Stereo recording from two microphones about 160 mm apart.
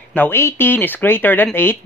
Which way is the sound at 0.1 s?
15° left (ahead or behind).